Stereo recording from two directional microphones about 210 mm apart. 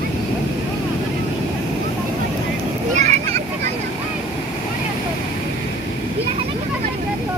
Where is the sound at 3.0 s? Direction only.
30° right (ahead or behind).